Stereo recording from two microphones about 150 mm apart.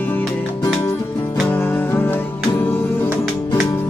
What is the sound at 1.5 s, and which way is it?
Music, 15° left (ahead or behind).